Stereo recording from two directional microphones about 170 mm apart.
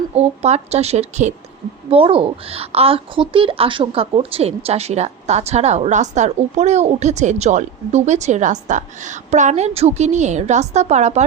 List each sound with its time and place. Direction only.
0.1 s a woman's voice: 40° right (ahead or behind)